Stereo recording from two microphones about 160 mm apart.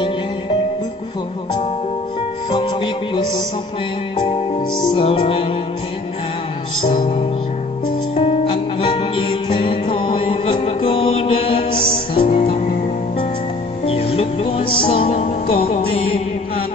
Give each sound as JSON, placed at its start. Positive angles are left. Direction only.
{"t": 4.8, "sound": "music", "side_deg": 35}
{"t": 6.8, "sound": "music", "side_deg": 35}
{"t": 13.8, "sound": "music", "side_deg": 40}